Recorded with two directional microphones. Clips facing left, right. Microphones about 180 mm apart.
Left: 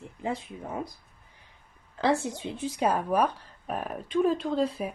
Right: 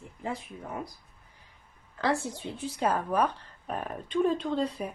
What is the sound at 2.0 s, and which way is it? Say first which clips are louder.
Speech: left 3 dB; 20° left (ahead or behind).